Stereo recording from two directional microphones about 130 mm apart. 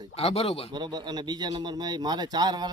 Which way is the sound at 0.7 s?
35° right (ahead or behind).